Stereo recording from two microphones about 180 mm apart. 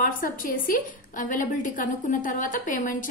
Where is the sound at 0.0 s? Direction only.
50° left (ahead or behind).